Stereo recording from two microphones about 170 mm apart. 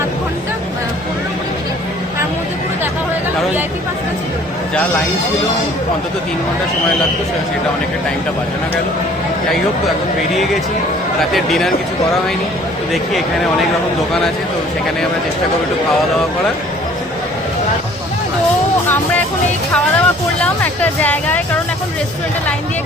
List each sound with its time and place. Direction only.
11.2 s speech: centre (ahead or behind)
12.9 s speech: centre (ahead or behind)
19.7 s speech: 5° left (ahead or behind)